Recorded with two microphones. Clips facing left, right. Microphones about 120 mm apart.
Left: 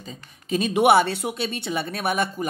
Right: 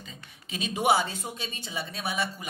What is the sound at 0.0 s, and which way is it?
Speech, 40° left (ahead or behind).